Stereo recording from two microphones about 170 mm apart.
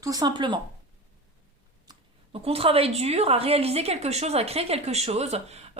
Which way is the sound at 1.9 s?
35° right (ahead or behind).